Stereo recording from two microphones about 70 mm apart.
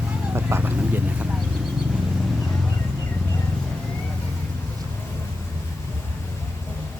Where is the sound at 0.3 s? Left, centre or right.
Right.